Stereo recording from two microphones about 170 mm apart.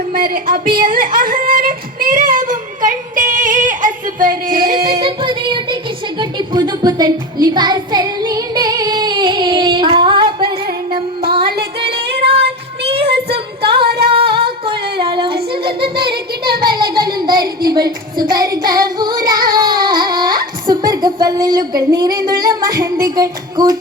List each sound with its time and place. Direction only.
0.1 s speech: 55° right (ahead or behind)
4.9 s a sound: 30° right (ahead or behind)
6.1 s music: 25° right (ahead or behind)
12.0 s female singing: 75° right (ahead or behind)
12.8 s child singing: 35° right (ahead or behind)
13.3 s female singing: 30° right (ahead or behind)
14.1 s singing: 30° right (ahead or behind)
15.0 s child singing: 30° right (ahead or behind)
16.7 s a sound: 25° right (ahead or behind)
17.8 s child singing: 25° right (ahead or behind)
22.8 s a sound: 25° right (ahead or behind)